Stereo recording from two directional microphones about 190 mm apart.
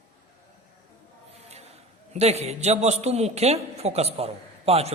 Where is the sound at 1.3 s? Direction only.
35° right (ahead or behind).